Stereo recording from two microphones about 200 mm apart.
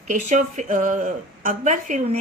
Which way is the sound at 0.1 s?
40° right (ahead or behind).